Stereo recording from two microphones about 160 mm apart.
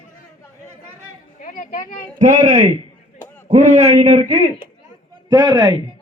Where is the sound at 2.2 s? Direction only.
50° right (ahead or behind).